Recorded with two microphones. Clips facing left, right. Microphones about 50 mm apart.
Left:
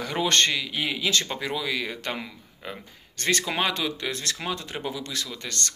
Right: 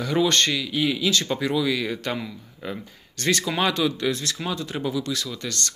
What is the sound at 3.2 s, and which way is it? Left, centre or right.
Speech, left.